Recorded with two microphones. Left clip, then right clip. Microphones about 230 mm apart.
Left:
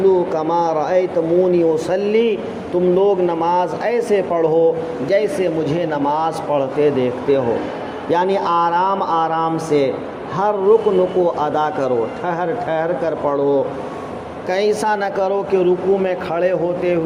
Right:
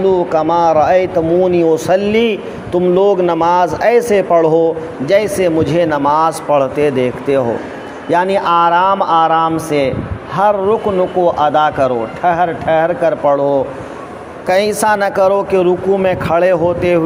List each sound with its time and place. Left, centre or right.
0.0 s a man's voice: right